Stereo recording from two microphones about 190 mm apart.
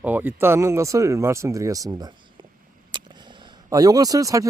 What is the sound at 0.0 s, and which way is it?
Speech, 10° right (ahead or behind).